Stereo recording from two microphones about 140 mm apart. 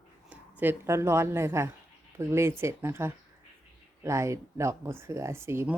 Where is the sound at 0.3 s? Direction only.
10° right (ahead or behind).